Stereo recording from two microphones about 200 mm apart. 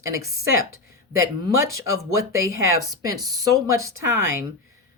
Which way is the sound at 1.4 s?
15° right (ahead or behind).